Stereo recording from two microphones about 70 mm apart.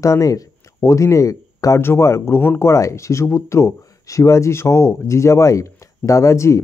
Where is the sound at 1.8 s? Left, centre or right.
Left.